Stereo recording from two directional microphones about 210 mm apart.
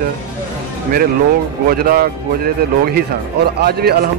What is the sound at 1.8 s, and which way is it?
Speech, 45° right (ahead or behind).